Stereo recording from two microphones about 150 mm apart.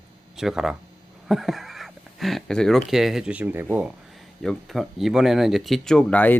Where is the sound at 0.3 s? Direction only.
Centre (ahead or behind).